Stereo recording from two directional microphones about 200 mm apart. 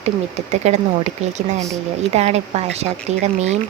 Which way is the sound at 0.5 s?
35° right (ahead or behind).